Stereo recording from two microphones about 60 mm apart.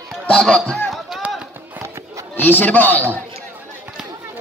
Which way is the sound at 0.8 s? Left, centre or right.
Centre.